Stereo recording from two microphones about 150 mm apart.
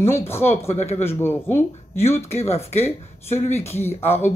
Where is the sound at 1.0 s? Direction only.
15° left (ahead or behind).